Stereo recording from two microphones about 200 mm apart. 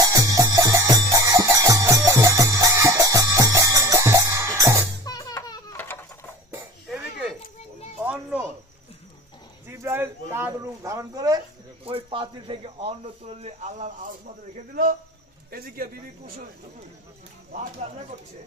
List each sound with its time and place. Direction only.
0.0 s music: 15° right (ahead or behind)
5.0 s baby laughter: 20° left (ahead or behind)
8.0 s children playing: 5° right (ahead or behind)
9.7 s a sound: 10° right (ahead or behind); by 14.1 s 35° right (ahead or behind)
14.5 s speech: 45° right (ahead or behind)